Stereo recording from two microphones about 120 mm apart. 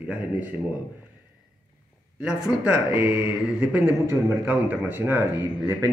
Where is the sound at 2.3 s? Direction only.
10° right (ahead or behind).